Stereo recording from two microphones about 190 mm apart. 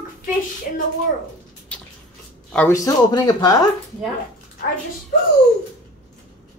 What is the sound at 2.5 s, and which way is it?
Speech, 15° left (ahead or behind).